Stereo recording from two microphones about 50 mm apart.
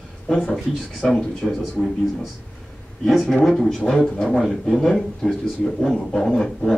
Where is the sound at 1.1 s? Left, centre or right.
Centre.